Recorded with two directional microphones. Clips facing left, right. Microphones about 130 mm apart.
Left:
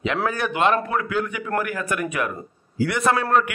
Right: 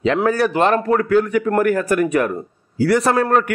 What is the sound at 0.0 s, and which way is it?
A man's voice, 35° right (ahead or behind).